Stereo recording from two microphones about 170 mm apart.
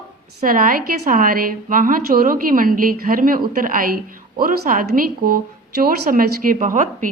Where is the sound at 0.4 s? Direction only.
55° right (ahead or behind).